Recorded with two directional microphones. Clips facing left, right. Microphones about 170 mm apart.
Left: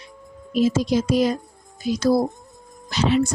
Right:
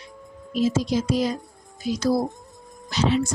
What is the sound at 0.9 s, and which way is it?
Speech, 60° left (ahead or behind).